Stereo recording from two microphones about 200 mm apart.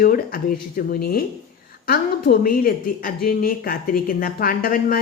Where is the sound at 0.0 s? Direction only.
45° left (ahead or behind).